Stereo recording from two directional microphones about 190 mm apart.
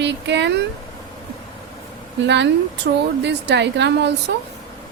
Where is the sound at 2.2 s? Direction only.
65° right (ahead or behind).